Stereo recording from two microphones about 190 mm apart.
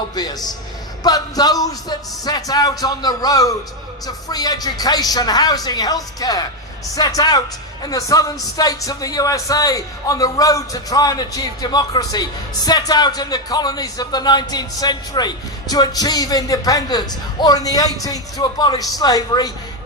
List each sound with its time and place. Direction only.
0.2 s speech: 20° left (ahead or behind)